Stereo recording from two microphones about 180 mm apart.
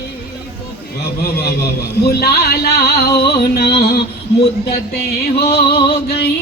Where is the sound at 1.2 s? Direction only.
60° left (ahead or behind).